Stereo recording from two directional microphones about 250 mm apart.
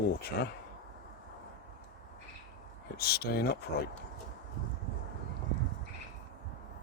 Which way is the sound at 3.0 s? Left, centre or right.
Left.